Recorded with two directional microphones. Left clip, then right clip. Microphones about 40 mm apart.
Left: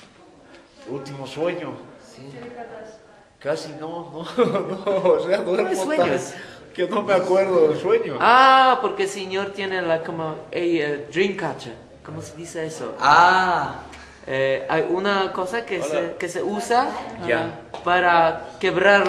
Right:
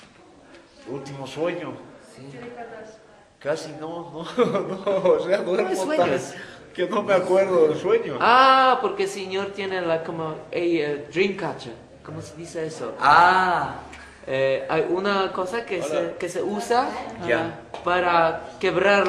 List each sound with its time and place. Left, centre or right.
0.9 s speech: centre
3.4 s a man's voice: centre
5.6 s speech: left
6.4 s a man's voice: centre
8.2 s speech: left
13.0 s speech: centre
14.3 s speech: left
16.9 s a woman's voice: right
17.2 s speech: centre
17.4 s speech: right
17.8 s speech: left